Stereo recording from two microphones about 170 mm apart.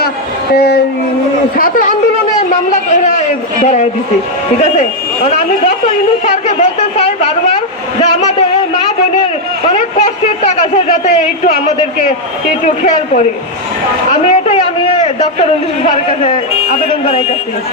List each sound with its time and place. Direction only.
0.5 s speech: 70° left (ahead or behind)
1.5 s speech: 55° left (ahead or behind)
2.5 s a sound: 45° left (ahead or behind)
4.6 s a woman's voice: 40° left (ahead or behind)
8.0 s a sound: 40° left (ahead or behind)
10.4 s a woman's voice: 40° left (ahead or behind)
14.3 s a man's voice: 40° left (ahead or behind)
17.1 s a woman's voice: 35° left (ahead or behind)